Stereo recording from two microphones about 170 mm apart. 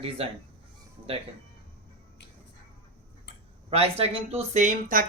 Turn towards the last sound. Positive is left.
turn(degrees=-50)  # may be behind; listen again after turning